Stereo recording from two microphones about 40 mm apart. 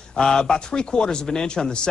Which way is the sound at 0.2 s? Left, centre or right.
Centre.